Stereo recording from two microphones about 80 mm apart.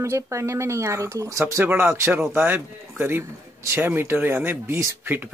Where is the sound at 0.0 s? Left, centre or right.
Right.